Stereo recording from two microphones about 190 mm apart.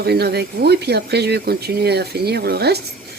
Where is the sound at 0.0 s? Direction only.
60° right (ahead or behind).